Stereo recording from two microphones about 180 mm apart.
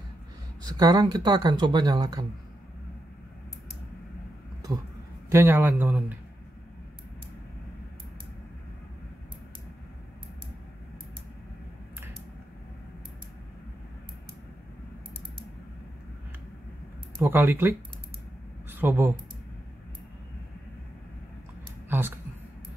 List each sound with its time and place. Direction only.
0.7 s speech: 20° right (ahead or behind)
5.3 s a man's voice: 10° right (ahead or behind)
17.3 s a man's voice: 10° right (ahead or behind)
21.8 s a sound: 10° right (ahead or behind)